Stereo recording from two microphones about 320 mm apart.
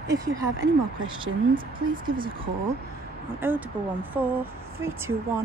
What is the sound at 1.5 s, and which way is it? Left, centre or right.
Speech, right.